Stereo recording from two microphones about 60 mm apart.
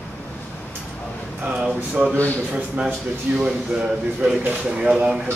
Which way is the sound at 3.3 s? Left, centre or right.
Centre.